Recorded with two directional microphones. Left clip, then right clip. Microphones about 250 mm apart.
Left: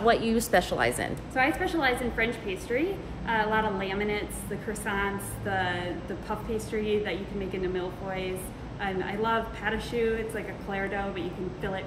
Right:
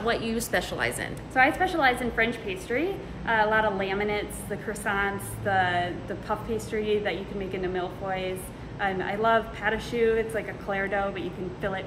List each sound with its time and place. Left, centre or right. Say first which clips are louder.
0.0 s a woman's voice: left 4 dB; centre
1.6 s a woman's voice: right 3 dB; centre